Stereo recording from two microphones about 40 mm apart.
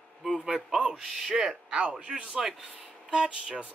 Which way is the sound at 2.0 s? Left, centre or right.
Right.